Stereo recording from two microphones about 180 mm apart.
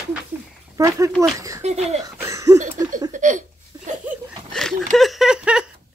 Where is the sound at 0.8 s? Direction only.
15° right (ahead or behind).